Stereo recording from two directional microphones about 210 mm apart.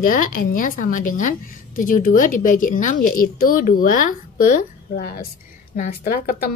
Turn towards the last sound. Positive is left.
turn(degrees=45)  # may be behind; listen again after turning